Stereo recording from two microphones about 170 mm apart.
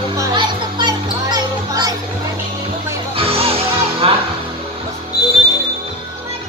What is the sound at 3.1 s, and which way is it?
Music, 35° right (ahead or behind).